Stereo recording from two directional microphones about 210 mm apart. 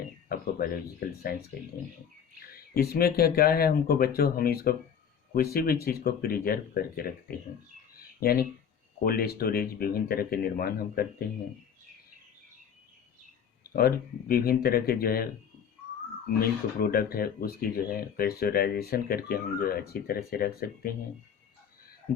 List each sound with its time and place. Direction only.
0.3 s speech: 45° left (ahead or behind)
2.7 s speech: 45° left (ahead or behind)
13.7 s speech: 45° left (ahead or behind)
16.8 s speech: 45° left (ahead or behind)